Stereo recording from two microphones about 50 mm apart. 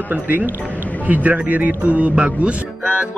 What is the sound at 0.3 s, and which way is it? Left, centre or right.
Speech, right.